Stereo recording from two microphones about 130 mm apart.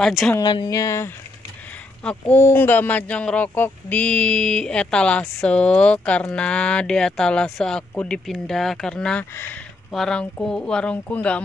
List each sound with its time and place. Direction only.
0.0 s speech: centre (ahead or behind)
0.4 s speech: 35° left (ahead or behind); by 9.2 s 5° left (ahead or behind)
9.3 s speech: 15° left (ahead or behind)
9.8 s speech: 5° left (ahead or behind)